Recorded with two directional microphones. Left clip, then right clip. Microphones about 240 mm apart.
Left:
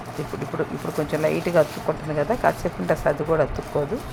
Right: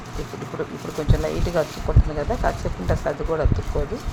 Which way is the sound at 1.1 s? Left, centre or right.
Left.